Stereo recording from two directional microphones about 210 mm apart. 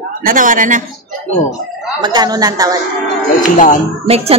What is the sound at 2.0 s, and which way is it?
Speech, 20° right (ahead or behind).